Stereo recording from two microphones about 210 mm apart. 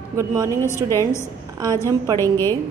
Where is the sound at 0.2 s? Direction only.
15° right (ahead or behind).